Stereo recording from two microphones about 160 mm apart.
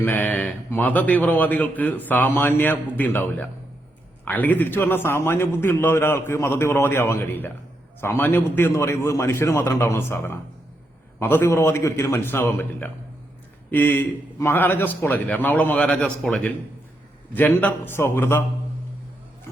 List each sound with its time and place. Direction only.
0.0 s a man's voice: 10° left (ahead or behind)